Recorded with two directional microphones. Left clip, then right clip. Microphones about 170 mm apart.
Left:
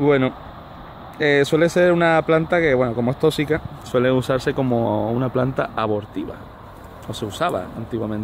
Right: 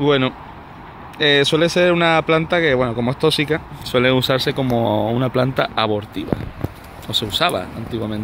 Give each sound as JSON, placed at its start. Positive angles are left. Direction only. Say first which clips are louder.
{"t": 0.0, "sound": "speech", "louder": "right 1 dB", "side_deg": 10}
{"t": 7.2, "sound": "speech", "louder": "right 1 dB", "side_deg": -5}